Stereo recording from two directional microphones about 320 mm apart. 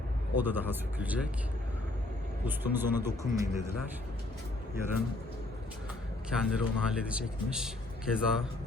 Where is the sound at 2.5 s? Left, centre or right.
Centre.